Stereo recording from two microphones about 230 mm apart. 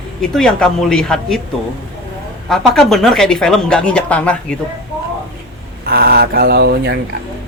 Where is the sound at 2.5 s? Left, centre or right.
Centre.